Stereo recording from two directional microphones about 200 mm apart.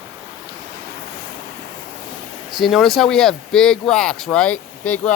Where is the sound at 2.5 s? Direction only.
Centre (ahead or behind).